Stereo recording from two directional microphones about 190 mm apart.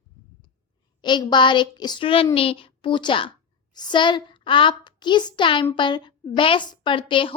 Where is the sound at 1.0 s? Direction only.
25° left (ahead or behind).